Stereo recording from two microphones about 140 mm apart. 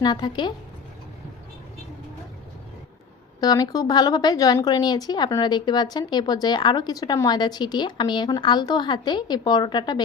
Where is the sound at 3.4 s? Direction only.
25° left (ahead or behind).